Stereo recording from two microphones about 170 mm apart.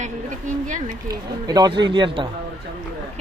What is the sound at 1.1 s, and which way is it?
Speech, 25° right (ahead or behind).